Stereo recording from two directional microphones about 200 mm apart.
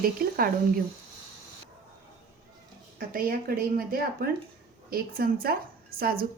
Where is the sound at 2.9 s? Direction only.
45° right (ahead or behind).